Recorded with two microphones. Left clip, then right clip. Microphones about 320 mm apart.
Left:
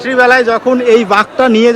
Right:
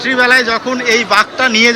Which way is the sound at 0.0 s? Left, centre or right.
Centre.